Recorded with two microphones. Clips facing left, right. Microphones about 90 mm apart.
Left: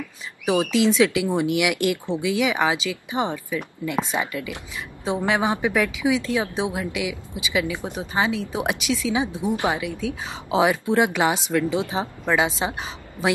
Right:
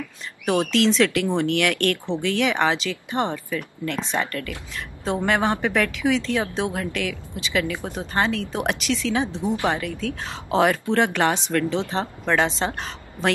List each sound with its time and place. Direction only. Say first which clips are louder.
0.5 s a woman's voice: even; 5° left (ahead or behind)